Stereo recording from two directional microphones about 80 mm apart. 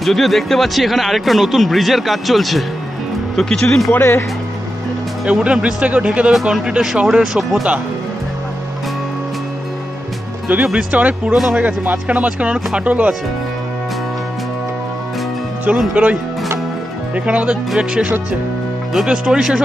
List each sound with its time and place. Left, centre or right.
0.0 s speech: centre
3.9 s speech: left
5.2 s speech: centre
10.5 s speech: centre
15.7 s speech: centre